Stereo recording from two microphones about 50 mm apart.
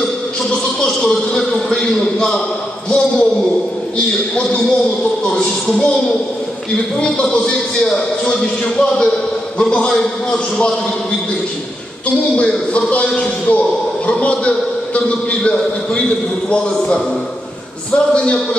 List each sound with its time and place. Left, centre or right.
0.8 s a man's voice: centre
7.0 s a man's voice: centre
12.4 s a man's voice: left